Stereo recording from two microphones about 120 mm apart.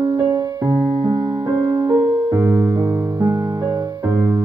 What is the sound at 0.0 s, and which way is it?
Music, 35° right (ahead or behind).